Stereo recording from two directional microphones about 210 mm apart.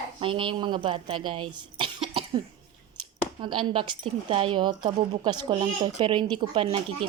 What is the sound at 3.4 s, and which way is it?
Speech, 25° right (ahead or behind).